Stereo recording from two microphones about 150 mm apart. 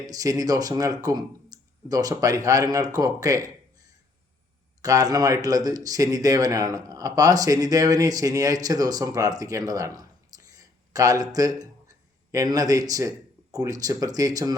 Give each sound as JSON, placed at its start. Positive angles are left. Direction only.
{"t": 0.0, "sound": "speech", "side_deg": -25}
{"t": 4.8, "sound": "speech", "side_deg": -25}